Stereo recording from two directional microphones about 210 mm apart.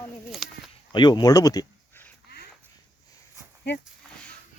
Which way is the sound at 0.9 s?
20° left (ahead or behind).